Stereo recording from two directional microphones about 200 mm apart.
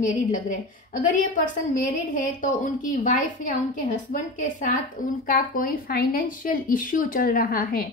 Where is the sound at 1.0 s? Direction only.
40° left (ahead or behind).